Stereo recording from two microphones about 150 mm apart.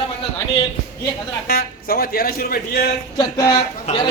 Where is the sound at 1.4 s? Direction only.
85° left.